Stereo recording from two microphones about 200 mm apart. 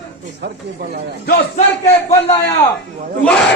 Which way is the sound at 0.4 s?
55° right (ahead or behind).